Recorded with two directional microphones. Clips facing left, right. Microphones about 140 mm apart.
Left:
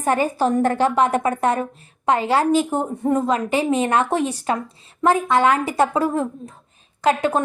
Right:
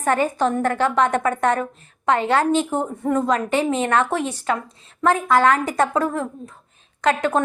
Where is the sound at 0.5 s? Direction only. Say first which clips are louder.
Left 3 dB; 30° left (ahead or behind).